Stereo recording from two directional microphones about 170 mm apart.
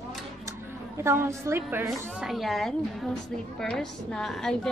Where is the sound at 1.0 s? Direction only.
15° right (ahead or behind).